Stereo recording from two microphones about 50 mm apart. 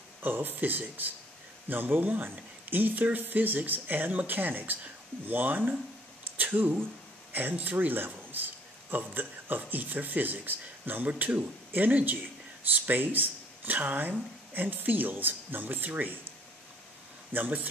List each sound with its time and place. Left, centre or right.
0.2 s speech: right
17.3 s speech: right